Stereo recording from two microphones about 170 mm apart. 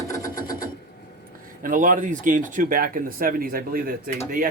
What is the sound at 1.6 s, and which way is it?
Speech, 50° right (ahead or behind).